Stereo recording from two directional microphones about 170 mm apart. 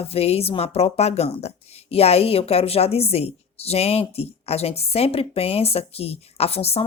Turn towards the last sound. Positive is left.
turn(degrees=35)  # may be behind; listen again after turning